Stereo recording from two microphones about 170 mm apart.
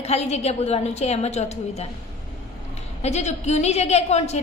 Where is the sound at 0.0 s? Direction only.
35° left (ahead or behind).